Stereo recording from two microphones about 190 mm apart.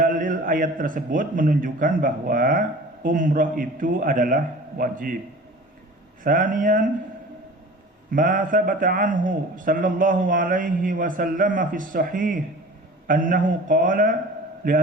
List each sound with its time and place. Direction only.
0.0 s a man's voice: 45° right (ahead or behind)
6.2 s a man's voice: 45° right (ahead or behind)
8.1 s a man's voice: 45° right (ahead or behind)